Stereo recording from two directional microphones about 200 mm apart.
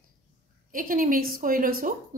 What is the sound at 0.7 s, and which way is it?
A woman's voice, 45° right (ahead or behind).